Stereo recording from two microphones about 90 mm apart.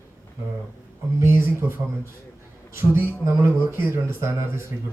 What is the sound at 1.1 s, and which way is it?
Speech, 30° right (ahead or behind).